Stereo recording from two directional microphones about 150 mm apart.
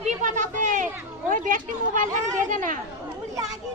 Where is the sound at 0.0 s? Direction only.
55° right (ahead or behind).